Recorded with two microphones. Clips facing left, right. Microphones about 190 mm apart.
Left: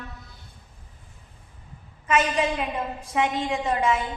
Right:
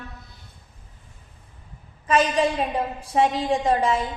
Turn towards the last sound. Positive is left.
turn(degrees=-35)  # may be behind; listen again after turning